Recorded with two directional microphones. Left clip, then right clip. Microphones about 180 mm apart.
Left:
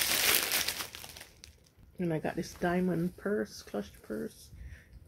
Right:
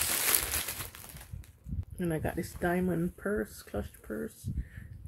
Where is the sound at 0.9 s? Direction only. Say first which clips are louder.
Left 4 dB; 35° left (ahead or behind).